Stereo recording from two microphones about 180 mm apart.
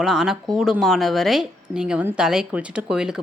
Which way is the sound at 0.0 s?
5° right (ahead or behind).